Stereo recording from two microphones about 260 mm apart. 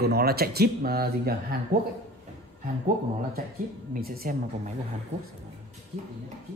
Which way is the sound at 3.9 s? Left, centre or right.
Right.